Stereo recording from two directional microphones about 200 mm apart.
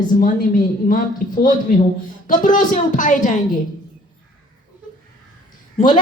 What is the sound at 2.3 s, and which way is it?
A woman's voice, 40° left (ahead or behind).